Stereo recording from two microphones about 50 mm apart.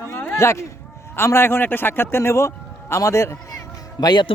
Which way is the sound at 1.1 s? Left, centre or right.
Left.